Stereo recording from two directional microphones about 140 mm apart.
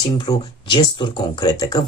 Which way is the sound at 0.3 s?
30° left (ahead or behind).